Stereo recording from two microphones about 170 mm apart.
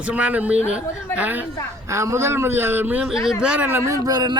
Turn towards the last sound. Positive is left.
turn(degrees=-20)  # may be behind; listen again after turning